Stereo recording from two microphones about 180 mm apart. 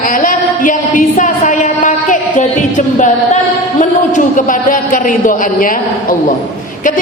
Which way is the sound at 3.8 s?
45° left (ahead or behind).